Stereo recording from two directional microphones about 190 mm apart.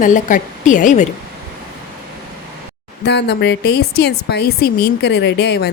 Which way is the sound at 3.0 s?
60° left (ahead or behind).